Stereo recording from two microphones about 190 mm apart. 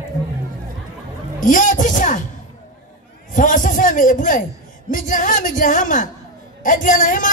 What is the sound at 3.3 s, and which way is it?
A woman's voice, 45° left (ahead or behind).